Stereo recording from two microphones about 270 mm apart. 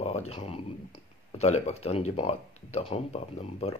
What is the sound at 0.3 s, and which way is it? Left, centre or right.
Speech, left.